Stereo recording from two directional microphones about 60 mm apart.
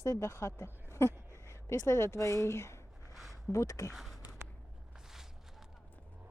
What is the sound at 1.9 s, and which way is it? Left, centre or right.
Speech, left.